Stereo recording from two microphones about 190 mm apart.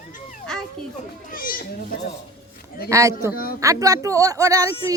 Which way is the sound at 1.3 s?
45° left (ahead or behind).